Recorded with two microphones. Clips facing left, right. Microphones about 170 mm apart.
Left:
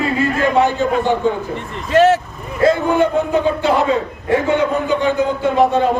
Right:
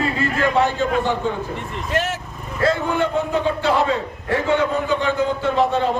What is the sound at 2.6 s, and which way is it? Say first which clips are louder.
A man's voice: left 6 dB; 15° left (ahead or behind).